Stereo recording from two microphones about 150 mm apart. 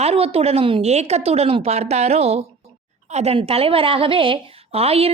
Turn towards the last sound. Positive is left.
turn(degrees=-40)  # may be behind; listen again after turning